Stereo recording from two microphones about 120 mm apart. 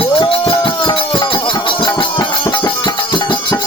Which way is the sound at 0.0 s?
40° left (ahead or behind).